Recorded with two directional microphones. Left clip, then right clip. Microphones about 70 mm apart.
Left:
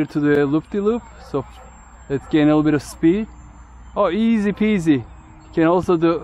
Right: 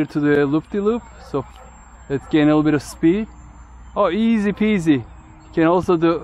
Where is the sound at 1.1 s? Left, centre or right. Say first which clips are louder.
Even; right.